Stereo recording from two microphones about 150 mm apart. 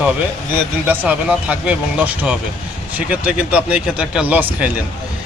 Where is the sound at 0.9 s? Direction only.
10° right (ahead or behind).